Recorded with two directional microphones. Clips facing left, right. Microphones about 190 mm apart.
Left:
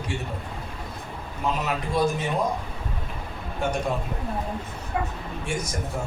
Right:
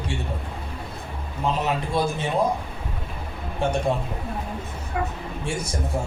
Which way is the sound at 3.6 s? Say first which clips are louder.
Right 3 dB; 30° right (ahead or behind).